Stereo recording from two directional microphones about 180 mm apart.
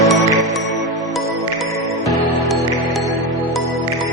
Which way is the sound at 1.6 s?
Centre (ahead or behind).